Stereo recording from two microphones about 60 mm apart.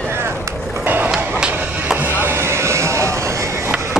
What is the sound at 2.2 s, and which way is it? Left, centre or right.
Vehicle, right.